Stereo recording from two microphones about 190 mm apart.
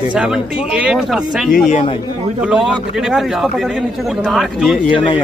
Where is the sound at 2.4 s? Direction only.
5° right (ahead or behind).